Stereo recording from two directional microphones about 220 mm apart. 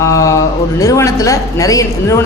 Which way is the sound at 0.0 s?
15° left (ahead or behind).